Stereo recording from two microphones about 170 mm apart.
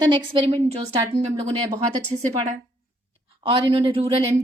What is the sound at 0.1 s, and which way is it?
Speech, 30° right (ahead or behind).